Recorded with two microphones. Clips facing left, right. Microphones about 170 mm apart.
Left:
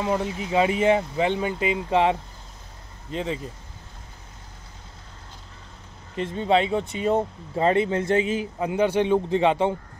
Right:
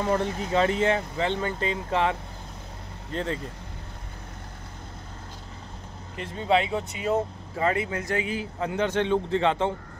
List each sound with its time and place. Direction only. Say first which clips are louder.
0.0 s speech: even; 10° left (ahead or behind)
6.1 s speech: left 3 dB; 25° left (ahead or behind)